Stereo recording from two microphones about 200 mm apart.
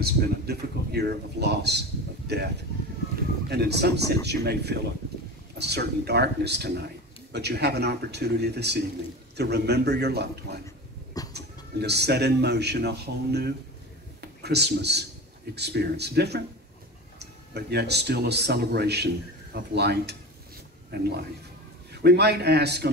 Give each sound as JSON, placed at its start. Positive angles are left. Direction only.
{"t": 0.0, "sound": "speech", "side_deg": -55}